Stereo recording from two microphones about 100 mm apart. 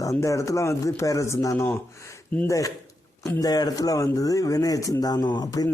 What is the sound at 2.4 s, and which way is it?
Speech, 35° left (ahead or behind).